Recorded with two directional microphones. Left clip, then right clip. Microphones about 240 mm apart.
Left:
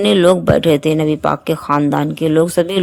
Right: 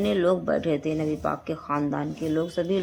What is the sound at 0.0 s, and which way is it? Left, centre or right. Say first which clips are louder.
Speech: left 12 dB; left.